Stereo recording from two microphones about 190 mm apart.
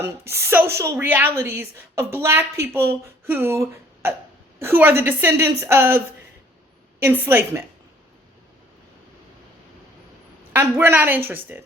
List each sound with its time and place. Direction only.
0.0 s a woman's voice: 15° right (ahead or behind)
7.0 s a woman's voice: 10° right (ahead or behind)
10.5 s a woman's voice: 10° right (ahead or behind)